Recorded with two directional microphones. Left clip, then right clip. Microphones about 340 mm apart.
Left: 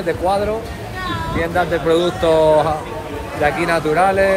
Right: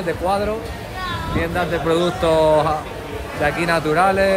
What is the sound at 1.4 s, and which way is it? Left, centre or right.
Speech, centre.